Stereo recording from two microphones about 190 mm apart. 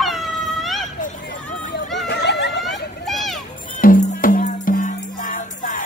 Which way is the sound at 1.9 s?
65° left (ahead or behind).